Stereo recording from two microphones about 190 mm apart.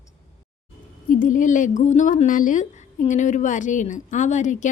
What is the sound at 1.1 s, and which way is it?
Speech, 45° left (ahead or behind).